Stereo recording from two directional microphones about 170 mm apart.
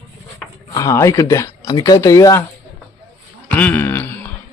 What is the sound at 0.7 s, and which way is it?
Speech, 20° left (ahead or behind).